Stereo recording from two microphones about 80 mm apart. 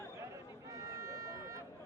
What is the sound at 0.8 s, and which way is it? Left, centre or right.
Run, right.